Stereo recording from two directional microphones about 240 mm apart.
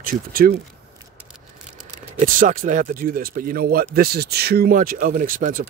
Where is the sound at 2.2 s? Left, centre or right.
Right.